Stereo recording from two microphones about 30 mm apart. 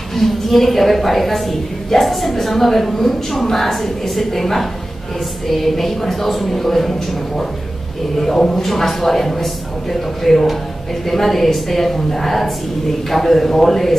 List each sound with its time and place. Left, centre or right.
0.1 s a woman's voice: centre
8.2 s a woman's voice: centre